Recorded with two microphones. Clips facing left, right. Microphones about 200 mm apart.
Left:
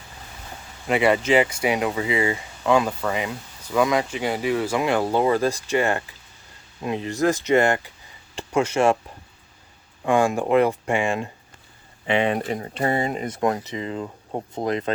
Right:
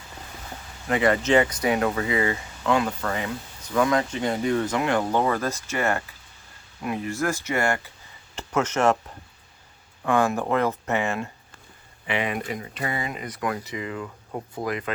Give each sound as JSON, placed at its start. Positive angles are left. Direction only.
{"t": 0.9, "sound": "speech", "side_deg": 15}
{"t": 10.0, "sound": "speech", "side_deg": 15}
{"t": 12.0, "sound": "speech", "side_deg": 25}